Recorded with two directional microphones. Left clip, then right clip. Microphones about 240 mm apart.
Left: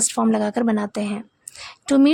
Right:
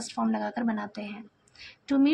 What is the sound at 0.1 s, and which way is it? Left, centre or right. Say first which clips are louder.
Speech: left 9 dB; left.